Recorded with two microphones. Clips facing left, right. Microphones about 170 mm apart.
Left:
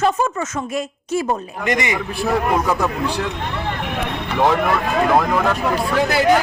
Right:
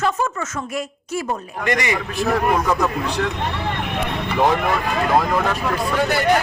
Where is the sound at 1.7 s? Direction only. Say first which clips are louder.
Left 1 dB; 20° left (ahead or behind).